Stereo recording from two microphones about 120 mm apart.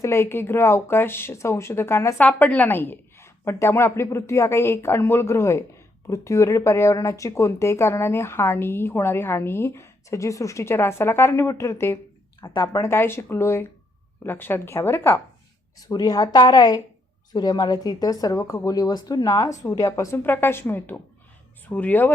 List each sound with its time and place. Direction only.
0.0 s speech: 20° left (ahead or behind)
15.8 s speech: 30° left (ahead or behind); by 22.1 s 15° left (ahead or behind)